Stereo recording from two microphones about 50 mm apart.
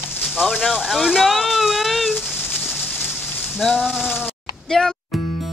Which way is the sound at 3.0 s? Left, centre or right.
Centre.